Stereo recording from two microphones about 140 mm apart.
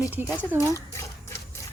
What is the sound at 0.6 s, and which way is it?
Speech, 20° left (ahead or behind).